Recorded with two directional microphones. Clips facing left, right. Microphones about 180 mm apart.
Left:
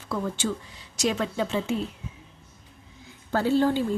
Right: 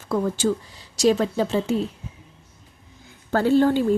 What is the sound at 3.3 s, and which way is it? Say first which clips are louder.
Speech: right 4 dB; 55° right (ahead or behind).